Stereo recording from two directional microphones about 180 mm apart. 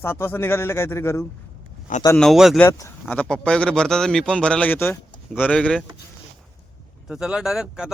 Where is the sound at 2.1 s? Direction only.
Centre (ahead or behind).